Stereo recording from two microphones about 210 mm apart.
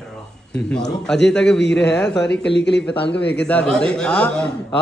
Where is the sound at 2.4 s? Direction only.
55° left (ahead or behind).